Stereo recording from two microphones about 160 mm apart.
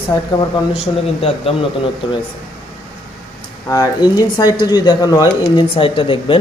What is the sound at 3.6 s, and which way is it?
A man's voice, 20° left (ahead or behind).